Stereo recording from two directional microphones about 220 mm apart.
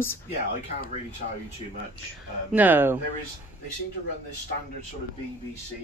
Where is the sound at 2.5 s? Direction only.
10° right (ahead or behind).